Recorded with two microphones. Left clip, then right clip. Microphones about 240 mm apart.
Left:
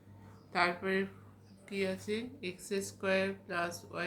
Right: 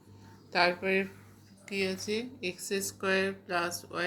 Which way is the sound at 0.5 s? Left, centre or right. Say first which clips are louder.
Right 5 dB; centre.